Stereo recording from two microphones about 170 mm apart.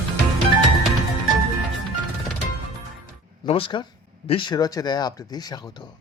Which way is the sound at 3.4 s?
30° left (ahead or behind).